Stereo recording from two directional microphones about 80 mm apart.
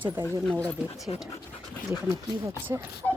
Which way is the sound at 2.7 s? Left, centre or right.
Right.